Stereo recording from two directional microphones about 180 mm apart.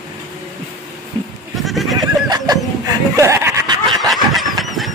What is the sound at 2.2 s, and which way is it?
Speech, 20° right (ahead or behind).